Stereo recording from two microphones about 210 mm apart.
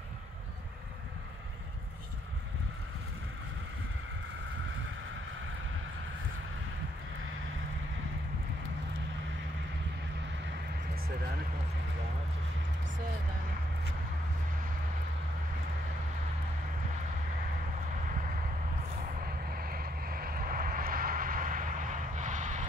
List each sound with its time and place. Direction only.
19.5 s vehicle: 45° right (ahead or behind)